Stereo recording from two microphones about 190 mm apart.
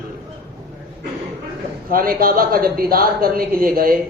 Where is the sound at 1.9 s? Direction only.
50° right (ahead or behind).